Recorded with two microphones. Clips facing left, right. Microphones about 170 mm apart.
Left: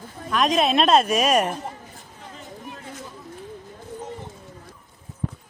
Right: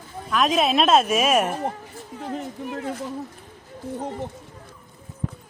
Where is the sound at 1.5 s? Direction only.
60° right (ahead or behind).